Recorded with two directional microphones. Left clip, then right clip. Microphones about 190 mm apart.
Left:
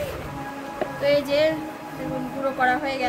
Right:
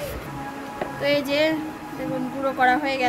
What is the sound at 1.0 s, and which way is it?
Speech, 20° right (ahead or behind).